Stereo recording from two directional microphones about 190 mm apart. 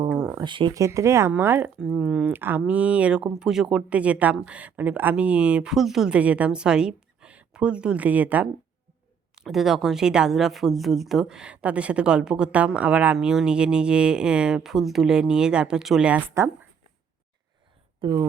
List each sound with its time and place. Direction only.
0.2 s a sound: 10° right (ahead or behind)
0.4 s speech: 25° right (ahead or behind)
18.0 s speech: 20° right (ahead or behind)